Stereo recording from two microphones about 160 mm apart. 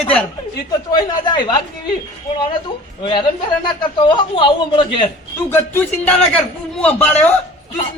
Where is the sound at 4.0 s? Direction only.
30° left (ahead or behind).